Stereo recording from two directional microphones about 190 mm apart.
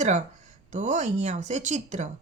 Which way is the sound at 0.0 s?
40° right (ahead or behind).